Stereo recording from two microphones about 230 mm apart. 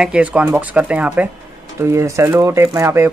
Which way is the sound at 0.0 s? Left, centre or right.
Centre.